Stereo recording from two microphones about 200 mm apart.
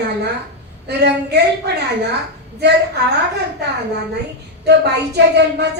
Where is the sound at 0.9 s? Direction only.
55° right (ahead or behind).